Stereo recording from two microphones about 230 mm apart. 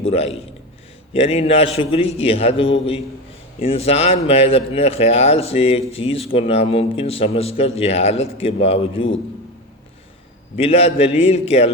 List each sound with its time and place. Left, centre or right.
0.0 s speech: left
10.6 s speech: left